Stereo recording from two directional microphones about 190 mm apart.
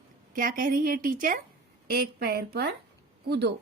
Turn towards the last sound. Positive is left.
turn(degrees=-60)  # may be behind; listen again after turning